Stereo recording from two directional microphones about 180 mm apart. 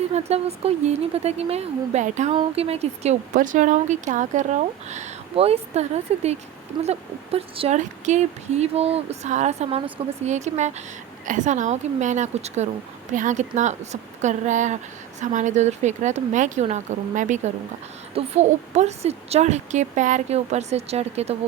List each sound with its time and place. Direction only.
0.1 s a woman's voice: 35° right (ahead or behind)
6.7 s a woman's voice: 25° right (ahead or behind)